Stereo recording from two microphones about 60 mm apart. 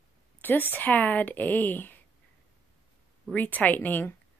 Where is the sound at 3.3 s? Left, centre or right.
Left.